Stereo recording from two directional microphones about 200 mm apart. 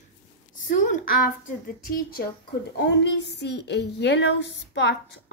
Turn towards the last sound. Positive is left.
turn(degrees=60)  # may be behind; listen again after turning